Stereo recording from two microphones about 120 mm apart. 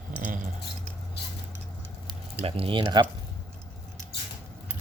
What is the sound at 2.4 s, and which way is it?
Speech, 50° right (ahead or behind).